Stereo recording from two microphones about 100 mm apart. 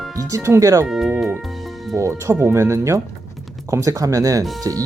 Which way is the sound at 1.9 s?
30° right (ahead or behind).